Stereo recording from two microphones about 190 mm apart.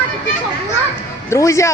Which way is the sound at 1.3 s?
15° left (ahead or behind).